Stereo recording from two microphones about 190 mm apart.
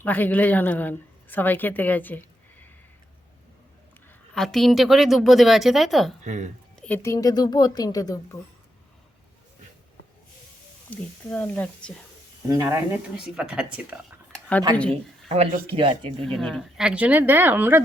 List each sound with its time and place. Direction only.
0.0 s a woman's voice: 10° left (ahead or behind)
4.4 s a woman's voice: centre (ahead or behind)
6.2 s a woman's voice: 40° right (ahead or behind)
6.7 s speech: 10° left (ahead or behind)
10.8 s speech: 5° left (ahead or behind)
12.5 s a woman's voice: 15° right (ahead or behind)
14.8 s speech: 5° left (ahead or behind)
15.7 s speech: 25° right (ahead or behind)
16.2 s speech: centre (ahead or behind)